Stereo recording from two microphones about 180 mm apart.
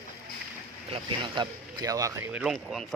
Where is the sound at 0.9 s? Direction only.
25° right (ahead or behind).